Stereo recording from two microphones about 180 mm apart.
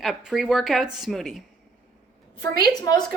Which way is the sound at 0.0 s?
Centre (ahead or behind).